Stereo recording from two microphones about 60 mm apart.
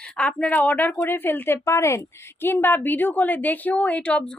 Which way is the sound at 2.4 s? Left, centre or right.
Left.